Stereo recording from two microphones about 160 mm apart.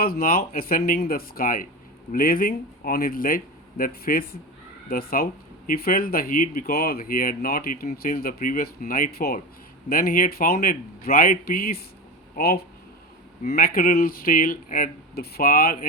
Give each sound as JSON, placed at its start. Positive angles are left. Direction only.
{"t": 0.0, "sound": "speech", "side_deg": 65}